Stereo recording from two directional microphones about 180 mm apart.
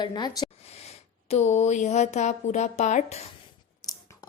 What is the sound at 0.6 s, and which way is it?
Speech, 35° left (ahead or behind).